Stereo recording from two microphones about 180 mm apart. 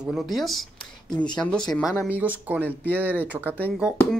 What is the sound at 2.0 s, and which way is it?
Speech, 10° right (ahead or behind).